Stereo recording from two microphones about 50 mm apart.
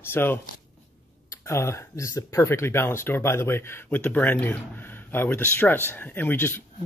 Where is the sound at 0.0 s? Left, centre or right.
Left.